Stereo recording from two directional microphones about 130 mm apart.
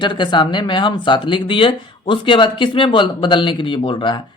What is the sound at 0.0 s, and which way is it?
Speech, 40° left (ahead or behind).